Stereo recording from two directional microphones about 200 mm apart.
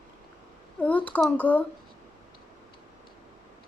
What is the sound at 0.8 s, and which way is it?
Speech, 10° left (ahead or behind).